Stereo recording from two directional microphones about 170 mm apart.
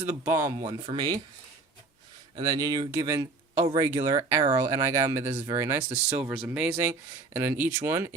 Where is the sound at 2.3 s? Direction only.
25° right (ahead or behind).